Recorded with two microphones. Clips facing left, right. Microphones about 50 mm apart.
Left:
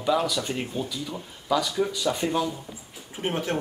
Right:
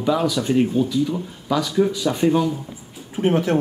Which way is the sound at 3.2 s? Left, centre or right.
Right.